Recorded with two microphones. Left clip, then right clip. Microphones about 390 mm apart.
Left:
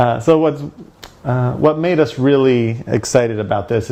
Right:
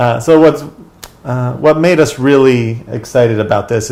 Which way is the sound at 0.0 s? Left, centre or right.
Left.